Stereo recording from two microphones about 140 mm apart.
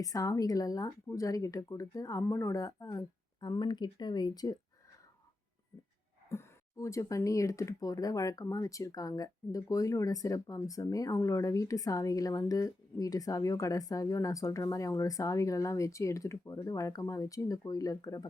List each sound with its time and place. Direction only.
0.0 s speech: 25° left (ahead or behind)
6.3 s speech: 20° left (ahead or behind)